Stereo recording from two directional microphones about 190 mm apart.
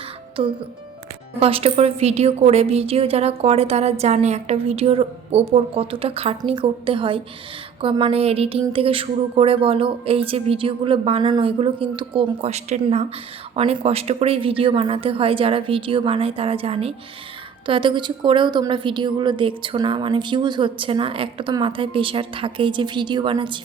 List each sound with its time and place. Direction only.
1.4 s a woman's voice: 30° right (ahead or behind)